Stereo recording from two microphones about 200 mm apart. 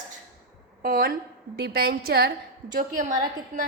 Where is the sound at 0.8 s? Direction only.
45° right (ahead or behind).